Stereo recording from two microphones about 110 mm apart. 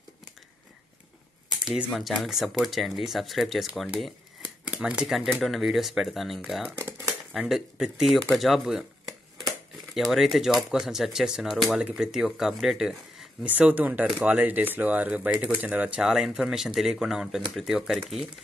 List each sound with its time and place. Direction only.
1.6 s typing: 5° right (ahead or behind)
1.9 s speech: centre (ahead or behind)
4.7 s speech: 5° right (ahead or behind)
6.8 s typewriter: 25° right (ahead or behind)
7.3 s speech: 5° right (ahead or behind)
9.9 s speech: centre (ahead or behind)